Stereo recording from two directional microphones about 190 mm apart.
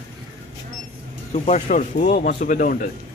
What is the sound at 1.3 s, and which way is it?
Speech, 35° left (ahead or behind).